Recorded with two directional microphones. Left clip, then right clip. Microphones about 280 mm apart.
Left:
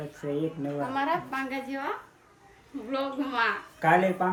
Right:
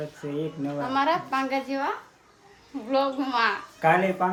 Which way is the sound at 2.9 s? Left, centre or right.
Centre.